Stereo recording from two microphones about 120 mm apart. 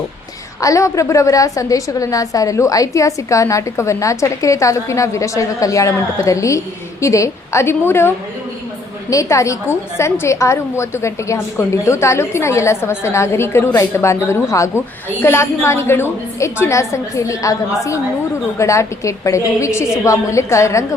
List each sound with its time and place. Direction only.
0.6 s a woman's voice: 25° left (ahead or behind)